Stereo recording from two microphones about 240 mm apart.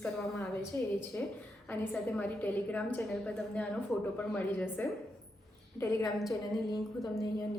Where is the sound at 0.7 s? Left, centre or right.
Centre.